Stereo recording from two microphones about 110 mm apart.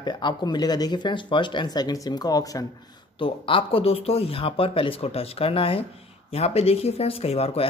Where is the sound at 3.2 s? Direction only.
55° left (ahead or behind).